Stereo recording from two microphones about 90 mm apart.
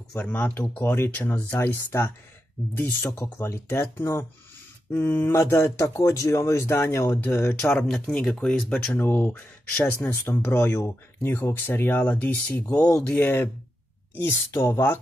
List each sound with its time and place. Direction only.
0.2 s speech: 20° left (ahead or behind)
8.1 s speech: 10° left (ahead or behind); by 15.0 s 25° left (ahead or behind)